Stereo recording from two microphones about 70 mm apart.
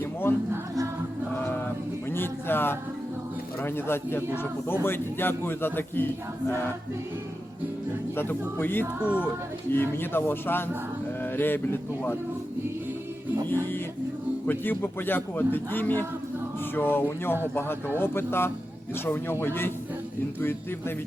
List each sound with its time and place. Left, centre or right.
0.0 s a sound: left
3.6 s a man's voice: left
8.1 s a man's voice: left
9.0 s speech: centre
9.7 s a man's voice: left
14.4 s a man's voice: left